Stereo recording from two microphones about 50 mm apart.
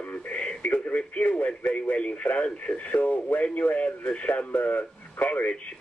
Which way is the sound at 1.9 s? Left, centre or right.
Left.